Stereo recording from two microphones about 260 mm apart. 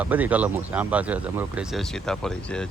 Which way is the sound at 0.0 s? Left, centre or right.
Centre.